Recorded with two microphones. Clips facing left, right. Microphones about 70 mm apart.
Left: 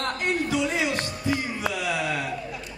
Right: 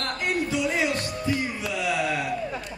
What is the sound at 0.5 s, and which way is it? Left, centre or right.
Music, left.